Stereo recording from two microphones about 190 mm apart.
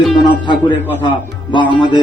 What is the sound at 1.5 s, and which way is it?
Speech, 25° left (ahead or behind).